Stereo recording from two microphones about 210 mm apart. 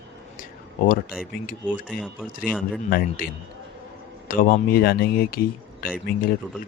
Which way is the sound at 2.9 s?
45° left (ahead or behind).